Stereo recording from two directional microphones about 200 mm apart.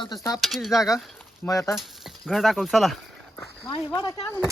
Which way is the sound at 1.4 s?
15° left (ahead or behind).